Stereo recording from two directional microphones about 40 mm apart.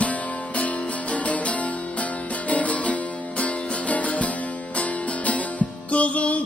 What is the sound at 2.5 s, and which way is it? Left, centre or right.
Music, left.